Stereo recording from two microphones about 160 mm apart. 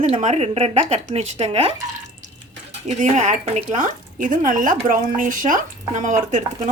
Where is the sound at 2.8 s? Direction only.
50° right (ahead or behind).